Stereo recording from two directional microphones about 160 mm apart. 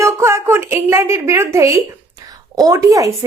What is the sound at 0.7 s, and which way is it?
Speech, 15° right (ahead or behind).